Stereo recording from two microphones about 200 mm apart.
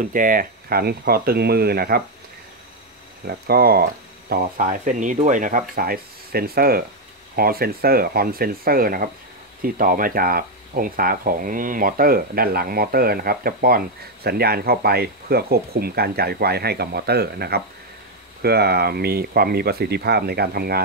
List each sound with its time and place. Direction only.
0.0 s speech: 45° right (ahead or behind)
3.3 s speech: 50° right (ahead or behind)